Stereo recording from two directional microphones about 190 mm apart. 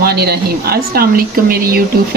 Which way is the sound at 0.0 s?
55° right (ahead or behind).